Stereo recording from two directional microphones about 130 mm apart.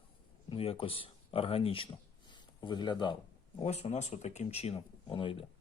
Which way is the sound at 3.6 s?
55° left (ahead or behind).